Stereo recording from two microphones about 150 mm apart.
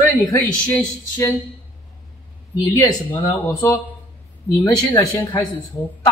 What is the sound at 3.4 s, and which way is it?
Speech, 10° left (ahead or behind).